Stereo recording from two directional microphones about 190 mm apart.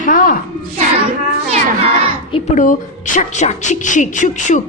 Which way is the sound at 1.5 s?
35° right (ahead or behind).